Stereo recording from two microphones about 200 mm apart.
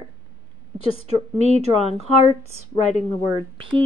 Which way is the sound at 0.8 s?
30° left (ahead or behind).